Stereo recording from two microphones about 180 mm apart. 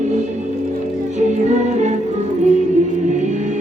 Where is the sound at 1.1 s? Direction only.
40° right (ahead or behind).